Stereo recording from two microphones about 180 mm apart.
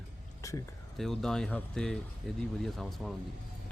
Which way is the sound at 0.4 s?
15° left (ahead or behind).